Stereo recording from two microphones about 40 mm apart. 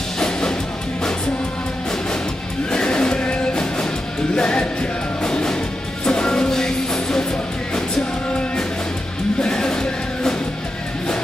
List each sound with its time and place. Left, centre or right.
0.2 s music: centre
2.7 s music: left
9.4 s music: left